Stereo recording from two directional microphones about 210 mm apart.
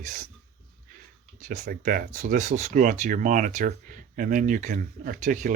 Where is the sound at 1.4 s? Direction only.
45° right (ahead or behind).